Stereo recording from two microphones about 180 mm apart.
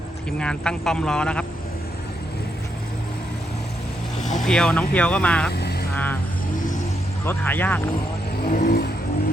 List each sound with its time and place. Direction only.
0.3 s a man's voice: 5° left (ahead or behind)
4.2 s vehicle: 45° left (ahead or behind)
4.4 s speech: 5° left (ahead or behind)
5.5 s vehicle: 65° left (ahead or behind)
5.9 s speech: 10° left (ahead or behind)
7.3 s speech: 10° left (ahead or behind)
8.4 s vehicle: 50° left (ahead or behind)